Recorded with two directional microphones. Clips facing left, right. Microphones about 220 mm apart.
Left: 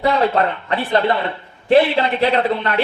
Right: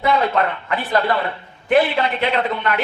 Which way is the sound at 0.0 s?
35° left (ahead or behind).